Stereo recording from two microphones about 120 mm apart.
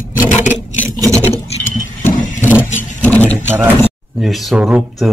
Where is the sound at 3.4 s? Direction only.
20° right (ahead or behind).